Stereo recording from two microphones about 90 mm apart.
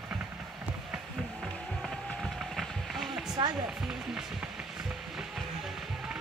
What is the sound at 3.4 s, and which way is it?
Speech, 65° right (ahead or behind).